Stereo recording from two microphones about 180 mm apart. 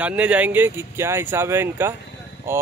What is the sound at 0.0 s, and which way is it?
Speech, 10° right (ahead or behind).